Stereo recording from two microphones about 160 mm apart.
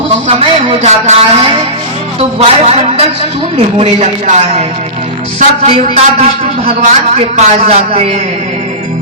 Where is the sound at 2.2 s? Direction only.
40° right (ahead or behind).